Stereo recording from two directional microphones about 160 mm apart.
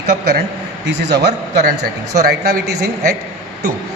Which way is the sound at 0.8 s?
90° right.